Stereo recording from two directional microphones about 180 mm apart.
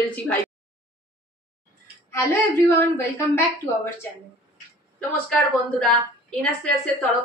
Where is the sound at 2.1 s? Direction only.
15° left (ahead or behind).